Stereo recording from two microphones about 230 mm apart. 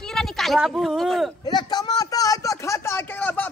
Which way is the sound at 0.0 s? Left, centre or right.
Centre.